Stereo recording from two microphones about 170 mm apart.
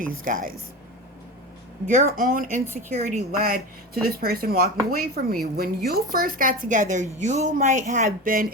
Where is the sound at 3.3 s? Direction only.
60° right (ahead or behind).